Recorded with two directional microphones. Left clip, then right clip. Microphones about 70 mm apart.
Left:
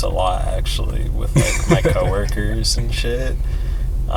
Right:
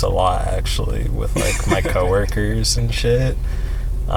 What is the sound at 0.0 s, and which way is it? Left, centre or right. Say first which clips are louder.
Speech: right 2 dB; right.